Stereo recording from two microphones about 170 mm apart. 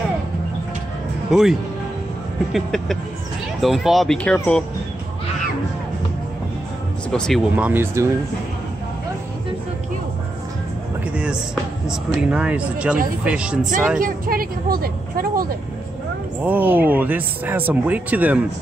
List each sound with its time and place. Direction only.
1.3 s speech: 5° right (ahead or behind)
7.1 s speech: 5° left (ahead or behind)
7.5 s speech: 10° right (ahead or behind)
12.2 s speech: 5° right (ahead or behind)
13.9 s speech: 55° right (ahead or behind)
16.4 s speech: 10° right (ahead or behind)